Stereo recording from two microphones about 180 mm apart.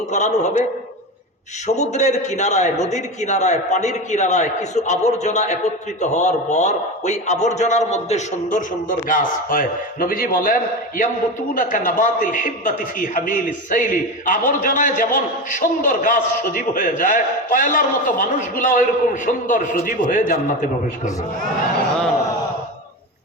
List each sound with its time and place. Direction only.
0.1 s a man's voice: 40° left (ahead or behind)
1.6 s a man's voice: 40° left (ahead or behind)